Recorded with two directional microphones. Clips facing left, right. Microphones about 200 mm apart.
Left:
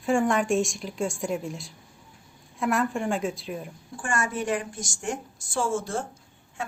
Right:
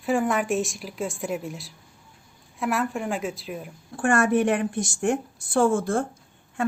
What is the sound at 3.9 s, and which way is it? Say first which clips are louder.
A woman's voice: right 9 dB; 60° right (ahead or behind).